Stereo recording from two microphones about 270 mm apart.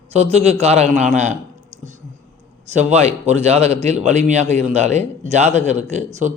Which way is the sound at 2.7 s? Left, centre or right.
Right.